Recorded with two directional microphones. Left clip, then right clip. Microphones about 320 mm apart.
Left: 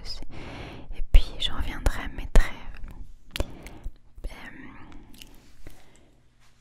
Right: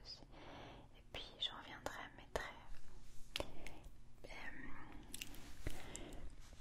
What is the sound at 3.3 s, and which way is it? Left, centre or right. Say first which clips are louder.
Whispering: left 11 dB; left.